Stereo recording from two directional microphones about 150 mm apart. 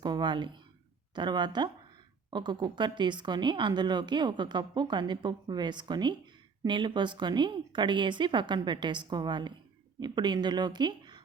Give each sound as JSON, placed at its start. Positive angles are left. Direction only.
{"t": 0.0, "sound": "a woman's voice", "side_deg": -30}